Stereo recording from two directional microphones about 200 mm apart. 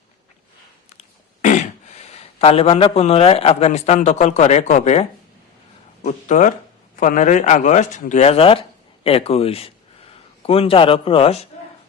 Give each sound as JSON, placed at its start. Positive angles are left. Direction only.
{"t": 0.9, "sound": "fart", "side_deg": 40}
{"t": 2.1, "sound": "a man's voice", "side_deg": 30}